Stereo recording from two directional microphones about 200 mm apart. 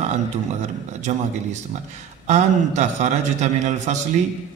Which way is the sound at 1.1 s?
40° right (ahead or behind).